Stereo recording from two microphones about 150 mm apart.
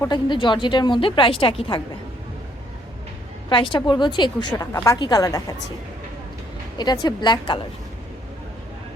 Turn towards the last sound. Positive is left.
turn(degrees=30)  # may be behind; listen again after turning